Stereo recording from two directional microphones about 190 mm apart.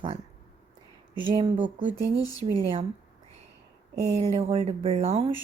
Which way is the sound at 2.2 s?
20° left (ahead or behind).